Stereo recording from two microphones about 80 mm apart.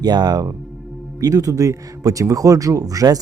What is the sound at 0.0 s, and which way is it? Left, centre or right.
Speech, right.